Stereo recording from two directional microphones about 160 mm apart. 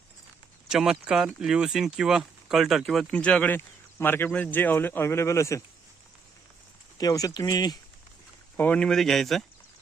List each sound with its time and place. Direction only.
0.7 s speech: 5° right (ahead or behind); by 5.6 s 20° left (ahead or behind)
7.0 s speech: 20° left (ahead or behind)
8.5 s speech: 10° left (ahead or behind)